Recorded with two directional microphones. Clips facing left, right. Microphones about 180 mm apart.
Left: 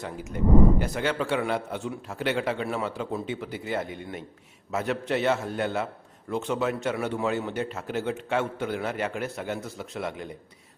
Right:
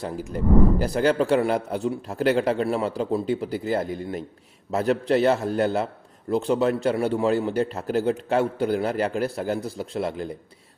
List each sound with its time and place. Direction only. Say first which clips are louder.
0.0 s a man's voice: right 2 dB; 35° right (ahead or behind)